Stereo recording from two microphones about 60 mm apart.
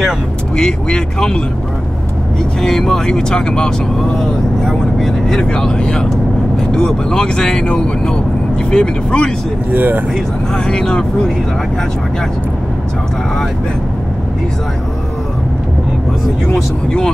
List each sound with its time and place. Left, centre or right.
0.6 s speech: centre
2.6 s speech: centre
9.7 s speech: right
10.5 s speech: centre
16.5 s speech: centre